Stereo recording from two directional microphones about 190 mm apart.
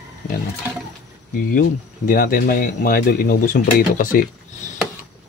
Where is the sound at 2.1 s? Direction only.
50° left (ahead or behind).